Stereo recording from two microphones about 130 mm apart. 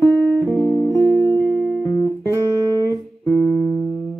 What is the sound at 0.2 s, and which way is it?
Music, 10° left (ahead or behind).